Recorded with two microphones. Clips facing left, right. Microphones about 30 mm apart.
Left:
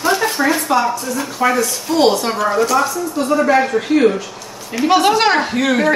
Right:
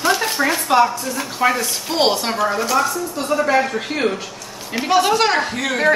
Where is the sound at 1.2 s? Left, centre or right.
Centre.